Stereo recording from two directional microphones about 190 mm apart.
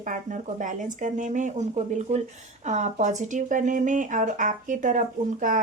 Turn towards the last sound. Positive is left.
turn(degrees=-45)  # may be behind; listen again after turning